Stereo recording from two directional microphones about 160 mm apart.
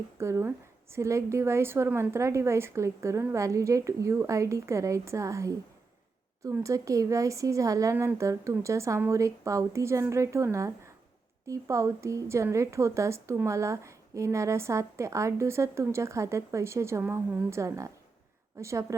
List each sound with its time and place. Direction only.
0.2 s a woman's voice: 15° right (ahead or behind)